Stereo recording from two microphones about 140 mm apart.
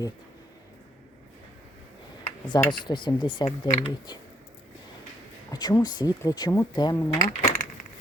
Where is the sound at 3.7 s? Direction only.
50° left (ahead or behind).